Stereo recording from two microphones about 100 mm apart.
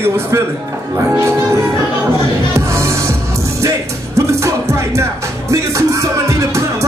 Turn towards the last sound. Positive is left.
turn(degrees=-30)  # may be behind; listen again after turning